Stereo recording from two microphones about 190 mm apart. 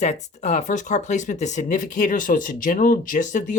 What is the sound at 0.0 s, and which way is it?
Speech, 35° left (ahead or behind).